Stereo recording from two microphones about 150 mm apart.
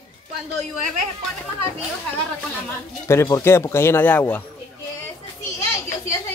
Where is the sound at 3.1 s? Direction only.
20° left (ahead or behind).